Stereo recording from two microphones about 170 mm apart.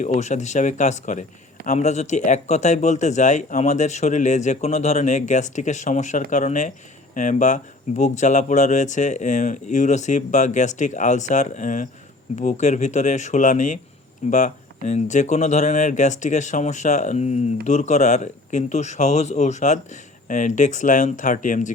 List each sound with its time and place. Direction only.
0.0 s speech: 45° left (ahead or behind)